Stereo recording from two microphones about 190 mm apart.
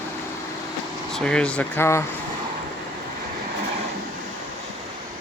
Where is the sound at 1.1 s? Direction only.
5° left (ahead or behind).